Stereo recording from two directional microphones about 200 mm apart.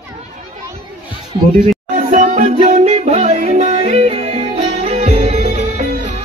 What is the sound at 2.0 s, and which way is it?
Music, 35° right (ahead or behind).